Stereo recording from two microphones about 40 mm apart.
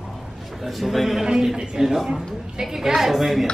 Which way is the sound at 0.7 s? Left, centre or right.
Centre.